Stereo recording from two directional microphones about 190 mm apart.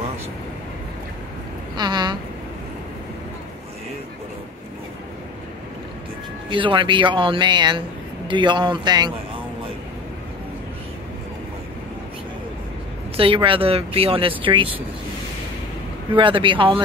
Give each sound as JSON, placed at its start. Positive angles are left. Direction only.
{"t": 1.8, "sound": "speech", "side_deg": -25}
{"t": 6.5, "sound": "speech", "side_deg": -25}
{"t": 13.1, "sound": "speech", "side_deg": -30}
{"t": 16.2, "sound": "speech", "side_deg": -25}